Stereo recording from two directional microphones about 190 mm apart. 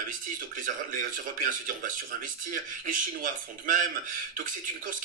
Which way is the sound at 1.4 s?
45° right (ahead or behind).